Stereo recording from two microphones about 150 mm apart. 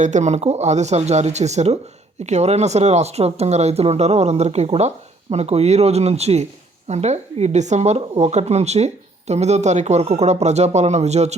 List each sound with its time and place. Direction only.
0.0 s speech: 50° right (ahead or behind)